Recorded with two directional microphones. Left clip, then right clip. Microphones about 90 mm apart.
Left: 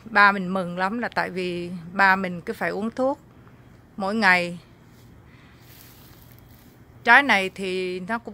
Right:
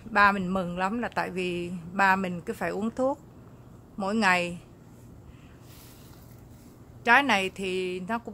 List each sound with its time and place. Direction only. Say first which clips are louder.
0.1 s speech: left 4 dB; 40° left (ahead or behind)
7.0 s speech: left 5 dB; 40° left (ahead or behind)